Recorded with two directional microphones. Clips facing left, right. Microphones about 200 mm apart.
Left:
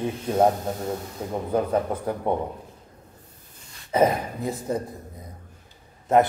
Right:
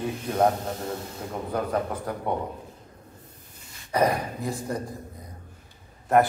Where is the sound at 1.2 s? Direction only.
25° left (ahead or behind).